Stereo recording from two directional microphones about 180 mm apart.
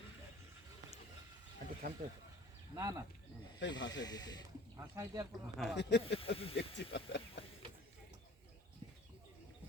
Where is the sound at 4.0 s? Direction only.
20° left (ahead or behind).